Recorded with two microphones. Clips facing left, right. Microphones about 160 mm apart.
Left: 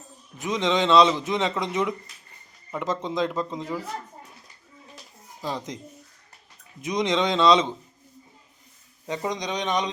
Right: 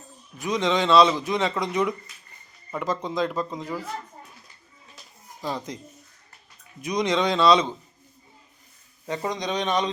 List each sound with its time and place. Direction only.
0.3 s a man's voice: 20° left (ahead or behind)
5.5 s a man's voice: 20° left (ahead or behind)
6.8 s a man's voice: 20° left (ahead or behind)
9.0 s speech: 15° left (ahead or behind)